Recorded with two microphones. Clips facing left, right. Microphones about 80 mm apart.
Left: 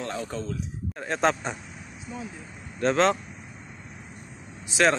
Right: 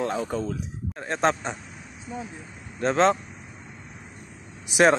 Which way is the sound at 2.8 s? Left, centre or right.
Centre.